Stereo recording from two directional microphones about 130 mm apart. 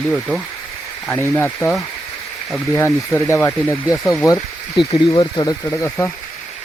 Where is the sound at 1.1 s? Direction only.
20° left (ahead or behind).